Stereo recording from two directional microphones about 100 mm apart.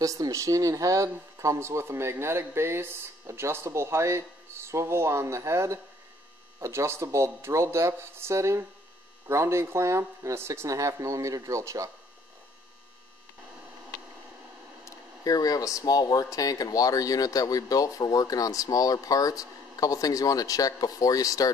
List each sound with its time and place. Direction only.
0.0 s speech: 35° right (ahead or behind)
14.9 s speech: 35° left (ahead or behind)